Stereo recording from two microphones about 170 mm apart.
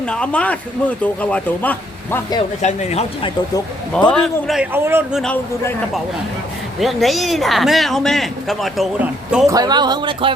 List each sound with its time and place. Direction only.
0.0 s speech: 5° left (ahead or behind)
2.6 s speech: 45° left (ahead or behind)
4.1 s speech: centre (ahead or behind)
5.2 s speech: 5° left (ahead or behind)
9.5 s speech: 25° right (ahead or behind)